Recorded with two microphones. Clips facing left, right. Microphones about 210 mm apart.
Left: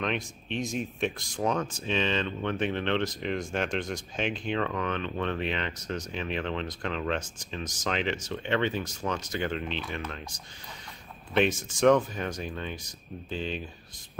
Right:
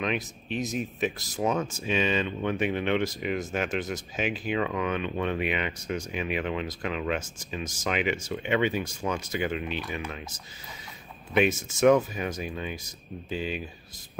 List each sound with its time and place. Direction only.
0.0 s speech: 5° right (ahead or behind)
11.3 s speech: 10° right (ahead or behind)